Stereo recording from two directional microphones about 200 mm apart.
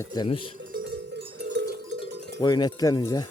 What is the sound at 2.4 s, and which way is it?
Speech, 20° left (ahead or behind).